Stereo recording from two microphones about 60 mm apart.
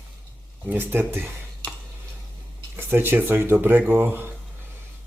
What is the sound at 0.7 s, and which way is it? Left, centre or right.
Speech, right.